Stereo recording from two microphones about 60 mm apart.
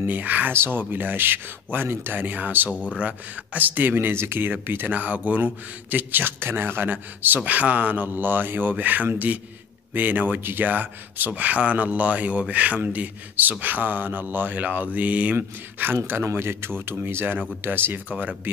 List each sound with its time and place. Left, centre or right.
0.0 s speech: right
0.5 s speech: right